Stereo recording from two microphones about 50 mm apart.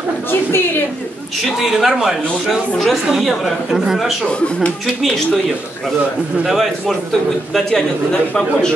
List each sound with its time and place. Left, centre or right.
0.3 s a woman's voice: left
1.4 s a man's voice: centre
3.2 s speech: centre
6.4 s speech: centre
7.7 s speech: centre